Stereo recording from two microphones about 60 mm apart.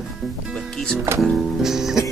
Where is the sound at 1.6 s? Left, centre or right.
Centre.